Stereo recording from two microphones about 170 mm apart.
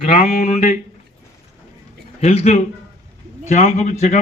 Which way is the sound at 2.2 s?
40° left (ahead or behind).